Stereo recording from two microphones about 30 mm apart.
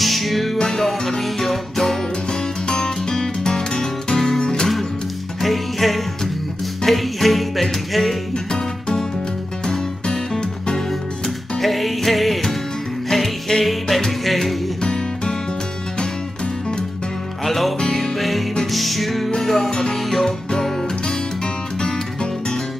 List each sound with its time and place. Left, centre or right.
0.0 s music: centre
2.6 s music: left
4.4 s music: left
5.4 s music: centre
8.5 s music: left
10.9 s music: centre
14.8 s music: left
17.5 s music: centre
19.7 s music: left
20.0 s music: centre
21.7 s music: left